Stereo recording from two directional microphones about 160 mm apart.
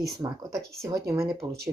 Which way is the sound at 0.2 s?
25° right (ahead or behind).